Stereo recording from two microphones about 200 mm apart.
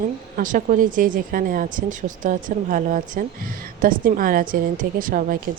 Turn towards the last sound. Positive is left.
turn(degrees=-45)  # may be behind; listen again after turning